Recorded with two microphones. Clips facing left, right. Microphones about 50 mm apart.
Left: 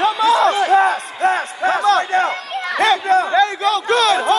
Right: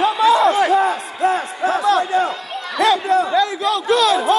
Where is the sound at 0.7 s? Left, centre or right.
Left.